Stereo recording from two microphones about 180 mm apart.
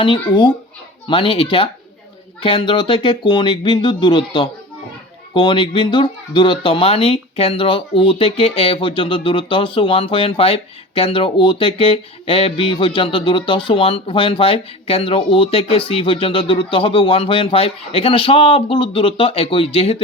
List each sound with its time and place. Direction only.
0.0 s speech: 25° left (ahead or behind)